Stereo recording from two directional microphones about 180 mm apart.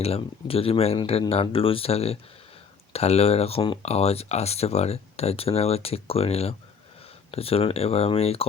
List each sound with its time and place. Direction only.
0.0 s speech: 35° left (ahead or behind)